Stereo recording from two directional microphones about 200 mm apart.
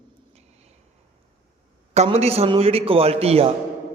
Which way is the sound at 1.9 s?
35° right (ahead or behind).